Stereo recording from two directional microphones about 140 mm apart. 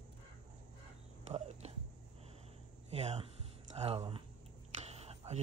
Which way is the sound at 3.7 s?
45° right (ahead or behind).